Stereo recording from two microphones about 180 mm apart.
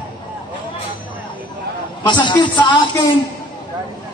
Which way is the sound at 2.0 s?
25° left (ahead or behind).